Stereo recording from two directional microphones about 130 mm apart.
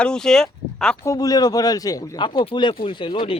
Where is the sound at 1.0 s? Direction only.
25° left (ahead or behind).